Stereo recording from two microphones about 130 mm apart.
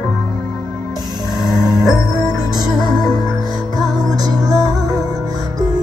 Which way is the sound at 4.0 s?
30° right (ahead or behind).